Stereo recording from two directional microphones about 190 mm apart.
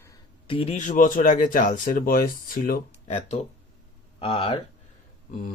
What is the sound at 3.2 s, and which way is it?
Speech, 35° left (ahead or behind).